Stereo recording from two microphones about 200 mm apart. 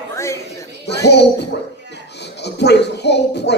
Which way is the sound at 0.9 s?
55° left (ahead or behind).